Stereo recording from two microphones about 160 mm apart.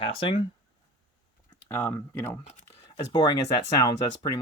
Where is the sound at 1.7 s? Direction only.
15° left (ahead or behind).